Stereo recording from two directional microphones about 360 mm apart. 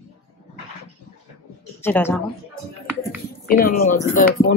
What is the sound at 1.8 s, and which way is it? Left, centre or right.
Speech, centre.